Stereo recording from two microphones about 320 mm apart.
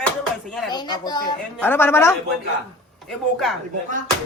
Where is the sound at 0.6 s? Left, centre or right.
Centre.